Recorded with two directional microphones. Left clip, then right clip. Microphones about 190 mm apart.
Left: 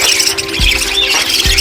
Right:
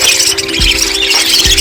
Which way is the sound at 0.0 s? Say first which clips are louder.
Right 2 dB; centre (ahead or behind).